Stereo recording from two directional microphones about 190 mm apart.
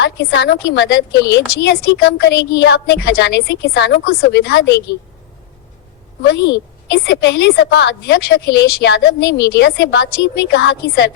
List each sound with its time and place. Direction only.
0.0 s a woman's voice: 60° left (ahead or behind)
6.2 s a woman's voice: 65° left (ahead or behind)